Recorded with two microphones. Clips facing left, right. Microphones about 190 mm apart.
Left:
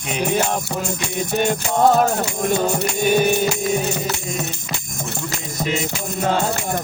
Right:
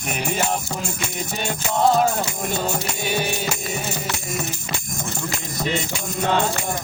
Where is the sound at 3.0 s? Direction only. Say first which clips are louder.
Left 11 dB; 50° left (ahead or behind).